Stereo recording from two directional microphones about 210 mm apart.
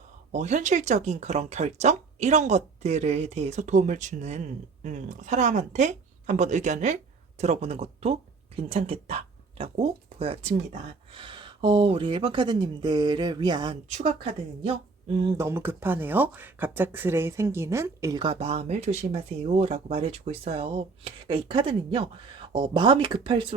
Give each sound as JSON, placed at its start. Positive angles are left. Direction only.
{"t": 0.3, "sound": "speech", "side_deg": -35}
{"t": 13.8, "sound": "speech", "side_deg": -35}
{"t": 15.2, "sound": "speech", "side_deg": -15}